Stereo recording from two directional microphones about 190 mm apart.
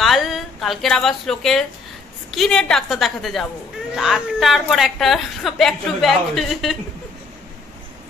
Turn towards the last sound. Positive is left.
turn(degrees=0)  # may be behind; listen again after turning